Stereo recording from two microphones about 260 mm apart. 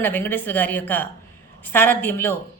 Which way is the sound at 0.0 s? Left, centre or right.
Centre.